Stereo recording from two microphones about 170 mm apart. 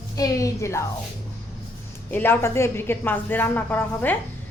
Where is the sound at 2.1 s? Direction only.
10° left (ahead or behind).